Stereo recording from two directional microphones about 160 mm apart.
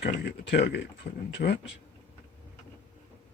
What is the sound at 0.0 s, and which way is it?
Speech, 90° left.